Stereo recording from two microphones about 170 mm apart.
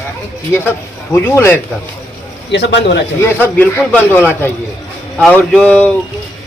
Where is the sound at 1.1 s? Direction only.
15° left (ahead or behind).